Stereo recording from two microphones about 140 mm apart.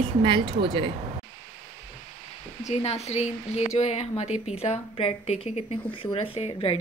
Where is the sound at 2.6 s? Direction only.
50° left (ahead or behind).